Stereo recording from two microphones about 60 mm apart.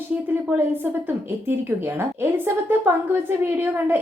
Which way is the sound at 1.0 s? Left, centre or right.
Right.